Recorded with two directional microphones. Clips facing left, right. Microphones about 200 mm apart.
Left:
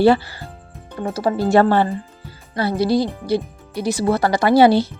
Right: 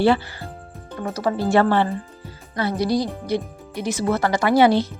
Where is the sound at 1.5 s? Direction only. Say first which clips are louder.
Left 3 dB; 40° left (ahead or behind).